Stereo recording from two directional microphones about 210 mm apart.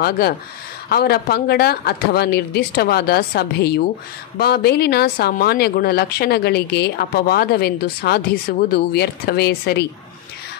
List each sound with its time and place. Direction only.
0.8 s speech: 45° left (ahead or behind)